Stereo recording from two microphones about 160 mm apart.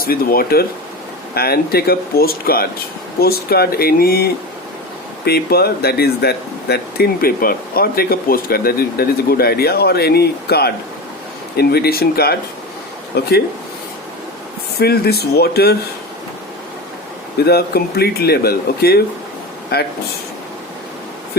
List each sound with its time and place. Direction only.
0.0 s speech: 70° left (ahead or behind)
13.1 s speech: 90° left
14.8 s speech: 80° left
17.3 s speech: 80° left